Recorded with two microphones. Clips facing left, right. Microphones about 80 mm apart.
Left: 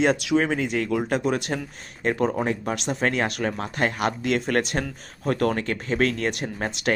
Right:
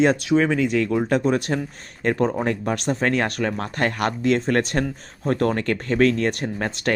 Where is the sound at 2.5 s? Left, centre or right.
Right.